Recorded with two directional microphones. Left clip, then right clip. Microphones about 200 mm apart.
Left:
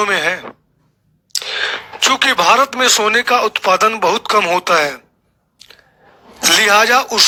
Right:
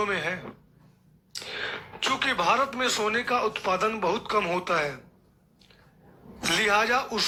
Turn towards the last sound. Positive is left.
turn(degrees=45)  # may be behind; listen again after turning